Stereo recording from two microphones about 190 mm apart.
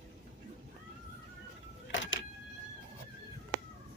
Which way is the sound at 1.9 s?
80° left.